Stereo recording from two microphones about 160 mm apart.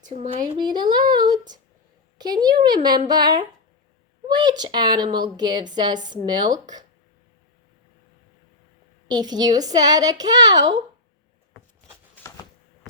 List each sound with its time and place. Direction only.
0.0 s speech: 45° right (ahead or behind)
0.6 s a woman's voice: 25° right (ahead or behind)
9.0 s a woman's voice: 25° right (ahead or behind)